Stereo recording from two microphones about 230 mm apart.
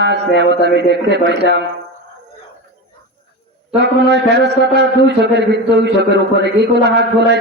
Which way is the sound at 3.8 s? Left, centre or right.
Right.